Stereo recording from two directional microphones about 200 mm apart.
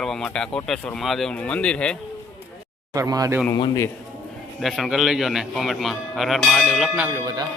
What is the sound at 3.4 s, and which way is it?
Speech, 15° left (ahead or behind).